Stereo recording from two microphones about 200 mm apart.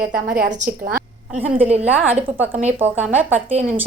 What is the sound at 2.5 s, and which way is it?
Speech, 35° right (ahead or behind).